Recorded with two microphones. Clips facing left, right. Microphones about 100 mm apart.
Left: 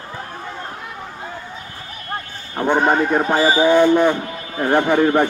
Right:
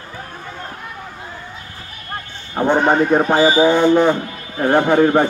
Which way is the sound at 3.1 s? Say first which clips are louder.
Right 3 dB; 20° right (ahead or behind).